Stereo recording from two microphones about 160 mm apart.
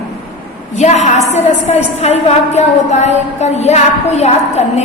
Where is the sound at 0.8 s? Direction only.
45° left (ahead or behind).